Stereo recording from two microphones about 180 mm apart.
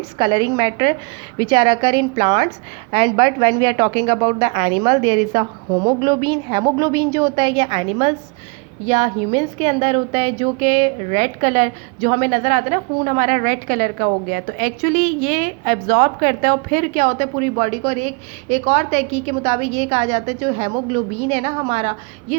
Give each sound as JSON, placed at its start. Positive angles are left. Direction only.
{"t": 0.2, "sound": "a woman's voice", "side_deg": -25}